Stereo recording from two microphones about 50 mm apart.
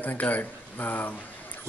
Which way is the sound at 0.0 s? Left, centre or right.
Left.